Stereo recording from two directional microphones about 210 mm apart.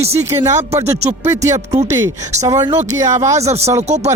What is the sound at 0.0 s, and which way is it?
Speech, 15° right (ahead or behind).